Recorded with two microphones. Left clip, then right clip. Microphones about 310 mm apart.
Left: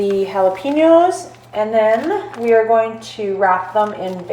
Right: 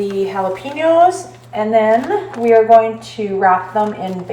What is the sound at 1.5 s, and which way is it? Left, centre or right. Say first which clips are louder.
A woman's voice: right 1 dB; centre.